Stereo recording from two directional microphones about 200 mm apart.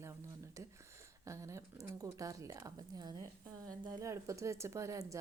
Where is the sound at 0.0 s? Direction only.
15° right (ahead or behind).